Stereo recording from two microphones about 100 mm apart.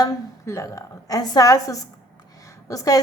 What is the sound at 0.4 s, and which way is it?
A woman's voice, 30° left (ahead or behind).